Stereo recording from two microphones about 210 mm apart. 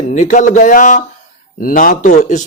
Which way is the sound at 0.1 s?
35° left (ahead or behind).